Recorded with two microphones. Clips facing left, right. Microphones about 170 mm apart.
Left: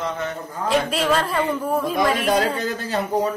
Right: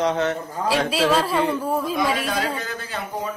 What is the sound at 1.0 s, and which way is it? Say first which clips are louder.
Speech: right 1 dB; 10° right (ahead or behind).